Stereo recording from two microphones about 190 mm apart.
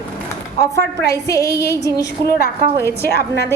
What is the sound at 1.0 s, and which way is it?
A woman's voice, 15° left (ahead or behind).